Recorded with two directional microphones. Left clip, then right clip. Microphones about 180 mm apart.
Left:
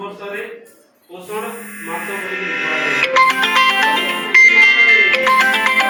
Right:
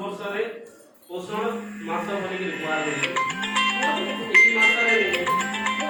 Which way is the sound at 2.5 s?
40° left (ahead or behind).